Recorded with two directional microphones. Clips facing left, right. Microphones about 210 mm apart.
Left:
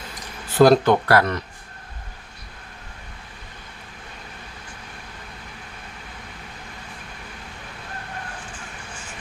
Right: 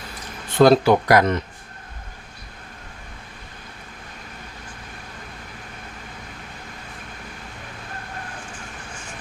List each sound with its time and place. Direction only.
0.5 s speech: centre (ahead or behind)
0.9 s speech: 15° right (ahead or behind)